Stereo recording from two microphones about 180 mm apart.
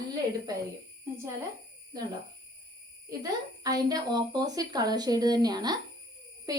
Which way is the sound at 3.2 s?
20° right (ahead or behind).